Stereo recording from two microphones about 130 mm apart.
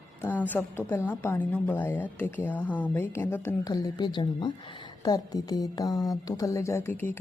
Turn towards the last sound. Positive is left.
turn(degrees=15)  # may be behind; listen again after turning